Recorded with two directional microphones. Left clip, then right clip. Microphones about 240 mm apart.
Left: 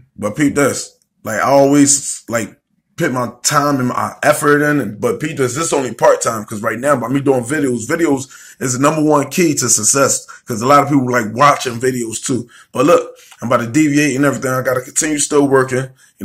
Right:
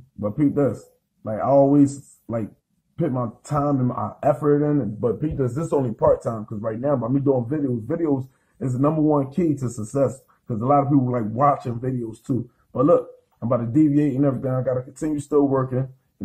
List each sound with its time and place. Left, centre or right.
0.2 s speech: left
13.4 s speech: left